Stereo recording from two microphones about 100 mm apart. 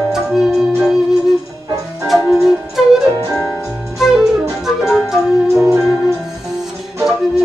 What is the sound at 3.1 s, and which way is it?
Music, 30° right (ahead or behind).